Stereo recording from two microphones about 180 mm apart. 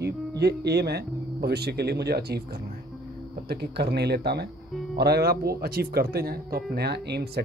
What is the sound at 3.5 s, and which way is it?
Speech, 65° right (ahead or behind).